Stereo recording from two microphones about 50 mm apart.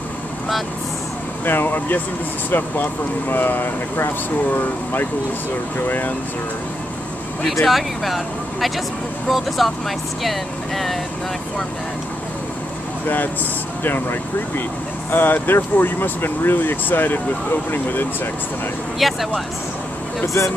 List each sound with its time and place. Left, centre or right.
1.4 s speech: left
7.6 s speech: centre
15.0 s speech: left
18.9 s speech: centre